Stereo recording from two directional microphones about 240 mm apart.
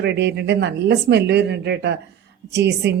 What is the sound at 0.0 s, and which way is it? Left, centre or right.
A woman's voice, right.